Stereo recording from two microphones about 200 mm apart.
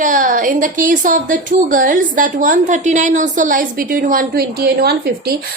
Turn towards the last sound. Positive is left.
turn(degrees=-55)  # may be behind; listen again after turning